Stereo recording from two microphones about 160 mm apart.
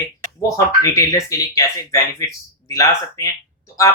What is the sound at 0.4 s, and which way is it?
Speech, 20° left (ahead or behind).